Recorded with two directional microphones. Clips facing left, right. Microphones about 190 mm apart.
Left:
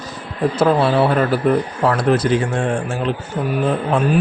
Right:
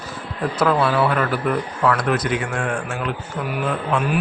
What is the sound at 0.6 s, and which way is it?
Speech, 30° left (ahead or behind).